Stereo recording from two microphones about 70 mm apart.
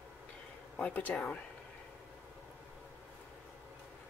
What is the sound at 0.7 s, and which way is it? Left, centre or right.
Speech, left.